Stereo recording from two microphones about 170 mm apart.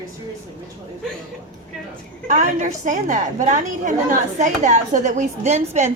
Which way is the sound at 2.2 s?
45° right (ahead or behind).